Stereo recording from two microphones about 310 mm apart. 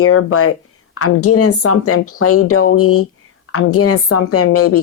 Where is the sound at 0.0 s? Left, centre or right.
Left.